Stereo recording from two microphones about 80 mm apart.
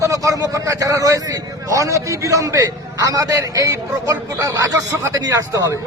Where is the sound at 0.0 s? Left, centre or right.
Right.